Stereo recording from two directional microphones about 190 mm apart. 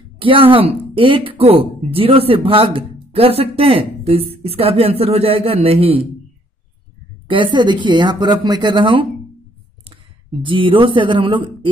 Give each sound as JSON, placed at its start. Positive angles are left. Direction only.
{"t": 0.2, "sound": "speech", "side_deg": -25}
{"t": 7.2, "sound": "speech", "side_deg": -25}
{"t": 10.4, "sound": "speech", "side_deg": -25}